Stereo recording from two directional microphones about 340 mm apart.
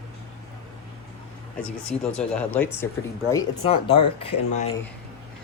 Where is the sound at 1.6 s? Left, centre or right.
Centre.